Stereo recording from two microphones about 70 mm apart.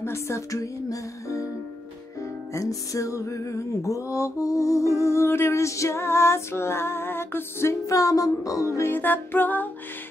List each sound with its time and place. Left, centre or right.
0.0 s music: left
2.5 s music: left
7.8 s music: left
8.8 s music: left